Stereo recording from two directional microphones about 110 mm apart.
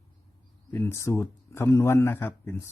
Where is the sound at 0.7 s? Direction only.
25° left (ahead or behind).